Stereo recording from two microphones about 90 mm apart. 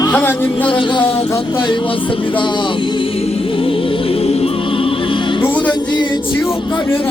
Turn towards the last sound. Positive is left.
turn(degrees=15)  # may be behind; listen again after turning